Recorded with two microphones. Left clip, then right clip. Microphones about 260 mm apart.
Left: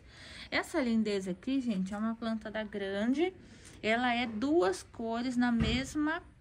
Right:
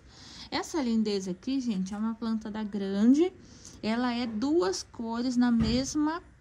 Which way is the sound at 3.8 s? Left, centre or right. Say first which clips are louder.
Left 1 dB; centre.